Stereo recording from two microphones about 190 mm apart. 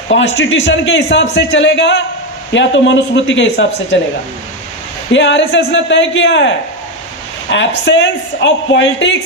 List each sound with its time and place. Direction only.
0.3 s speech: 80° left
5.1 s speech: 70° left (ahead or behind)
7.5 s speech: 70° left (ahead or behind)